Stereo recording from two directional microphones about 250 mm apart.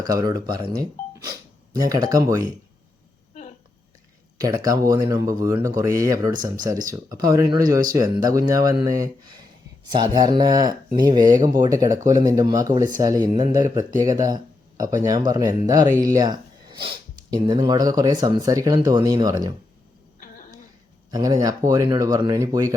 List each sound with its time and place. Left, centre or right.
0.0 s speech: centre
4.4 s speech: centre
20.1 s a sound: left
21.1 s speech: centre